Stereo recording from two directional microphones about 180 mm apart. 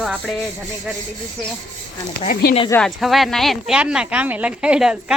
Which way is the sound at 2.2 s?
45° left (ahead or behind).